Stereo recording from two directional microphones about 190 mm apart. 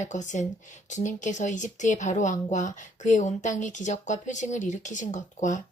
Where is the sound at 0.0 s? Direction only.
40° left (ahead or behind).